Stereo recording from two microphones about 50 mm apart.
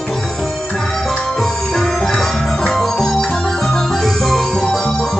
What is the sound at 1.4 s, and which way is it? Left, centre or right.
Music, centre.